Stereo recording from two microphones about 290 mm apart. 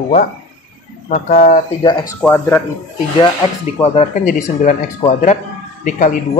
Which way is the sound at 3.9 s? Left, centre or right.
Left.